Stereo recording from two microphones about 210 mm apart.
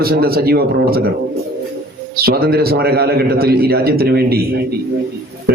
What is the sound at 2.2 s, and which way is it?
A man's voice, 50° right (ahead or behind).